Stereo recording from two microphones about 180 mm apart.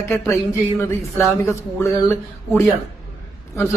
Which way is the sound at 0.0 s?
15° left (ahead or behind).